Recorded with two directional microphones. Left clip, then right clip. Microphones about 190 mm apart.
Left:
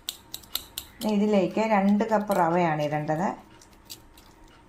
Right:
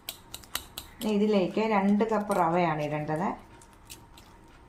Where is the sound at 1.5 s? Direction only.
25° left (ahead or behind).